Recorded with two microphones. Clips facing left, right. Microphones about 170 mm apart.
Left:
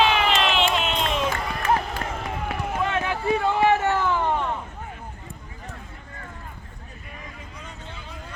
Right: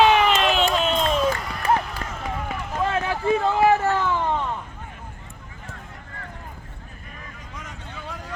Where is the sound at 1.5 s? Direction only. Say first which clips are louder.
Right 1 dB; 45° left (ahead or behind).